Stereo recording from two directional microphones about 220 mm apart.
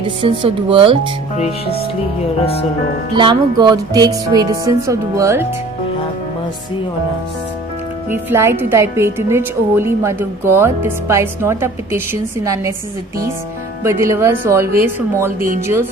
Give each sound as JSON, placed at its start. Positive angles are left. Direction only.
{"t": 0.2, "sound": "speech", "side_deg": -25}
{"t": 1.6, "sound": "speech", "side_deg": 45}
{"t": 2.4, "sound": "speech", "side_deg": 25}
{"t": 3.2, "sound": "a woman's voice", "side_deg": -20}
{"t": 8.1, "sound": "a woman's voice", "side_deg": -10}
{"t": 13.8, "sound": "a woman's voice", "side_deg": -10}